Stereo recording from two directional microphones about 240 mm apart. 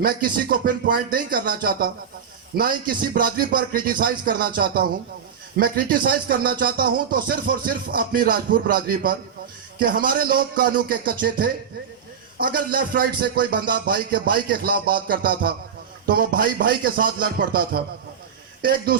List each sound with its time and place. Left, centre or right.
0.0 s speech: right